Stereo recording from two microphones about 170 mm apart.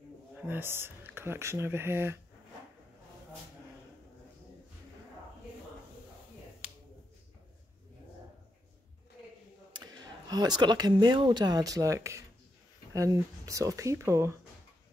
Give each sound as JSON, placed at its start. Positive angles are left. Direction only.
{"t": 0.4, "sound": "speech", "side_deg": -10}
{"t": 9.7, "sound": "speech", "side_deg": -25}